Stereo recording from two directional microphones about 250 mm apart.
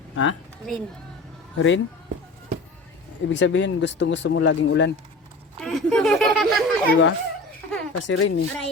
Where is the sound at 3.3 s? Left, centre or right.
Left.